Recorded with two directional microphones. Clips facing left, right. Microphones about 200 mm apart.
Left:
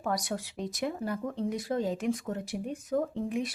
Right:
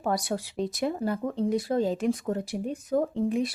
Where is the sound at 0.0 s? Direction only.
30° right (ahead or behind).